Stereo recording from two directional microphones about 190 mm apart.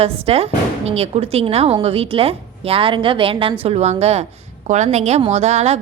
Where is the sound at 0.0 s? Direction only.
30° right (ahead or behind).